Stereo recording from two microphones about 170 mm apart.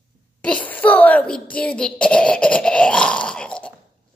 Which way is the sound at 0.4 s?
10° left (ahead or behind).